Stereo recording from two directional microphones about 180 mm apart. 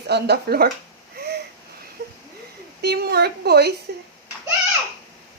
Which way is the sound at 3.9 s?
60° right (ahead or behind).